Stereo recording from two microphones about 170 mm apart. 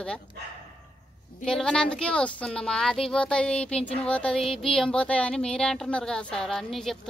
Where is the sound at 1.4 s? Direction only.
5° left (ahead or behind).